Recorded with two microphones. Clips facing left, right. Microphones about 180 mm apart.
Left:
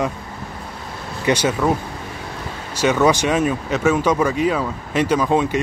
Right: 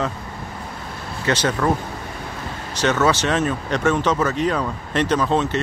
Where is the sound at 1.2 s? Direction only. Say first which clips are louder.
Left 2 dB; 10° left (ahead or behind).